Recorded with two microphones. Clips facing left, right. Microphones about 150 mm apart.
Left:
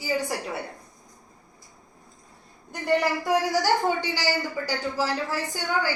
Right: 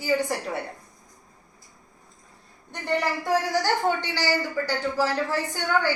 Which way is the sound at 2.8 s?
10° left (ahead or behind).